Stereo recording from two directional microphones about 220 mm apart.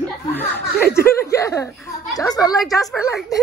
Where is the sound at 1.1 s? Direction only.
15° left (ahead or behind).